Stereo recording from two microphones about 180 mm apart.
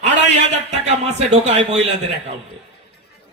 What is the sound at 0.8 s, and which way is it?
Speech, 35° right (ahead or behind).